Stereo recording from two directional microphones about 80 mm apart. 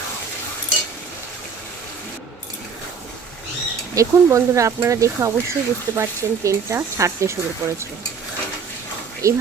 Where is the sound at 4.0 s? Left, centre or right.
Right.